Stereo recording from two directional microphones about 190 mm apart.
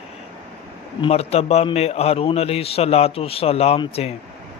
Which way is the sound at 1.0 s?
35° left (ahead or behind).